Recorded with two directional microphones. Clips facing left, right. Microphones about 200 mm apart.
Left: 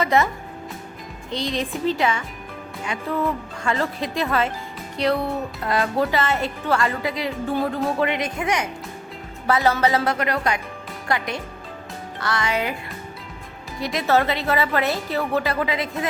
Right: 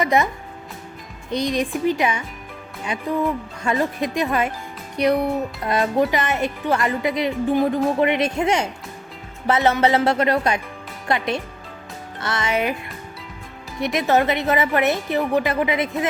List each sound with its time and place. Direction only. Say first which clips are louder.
0.0 s speech: right 1 dB; 15° right (ahead or behind)
1.4 s speech: right 4 dB; 15° right (ahead or behind)
13.7 s speech: right 2 dB; 20° right (ahead or behind)